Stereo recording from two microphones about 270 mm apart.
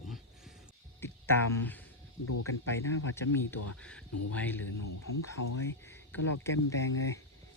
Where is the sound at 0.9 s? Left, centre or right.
Centre.